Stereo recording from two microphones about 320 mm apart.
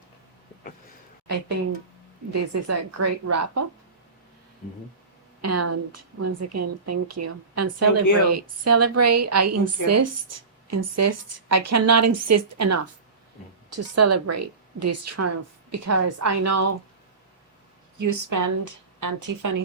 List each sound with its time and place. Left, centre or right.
2.3 s a woman's voice: right
5.4 s a woman's voice: right
17.9 s speech: right